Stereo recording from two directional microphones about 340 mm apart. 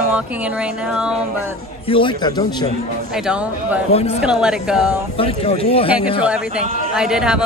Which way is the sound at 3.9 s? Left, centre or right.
Centre.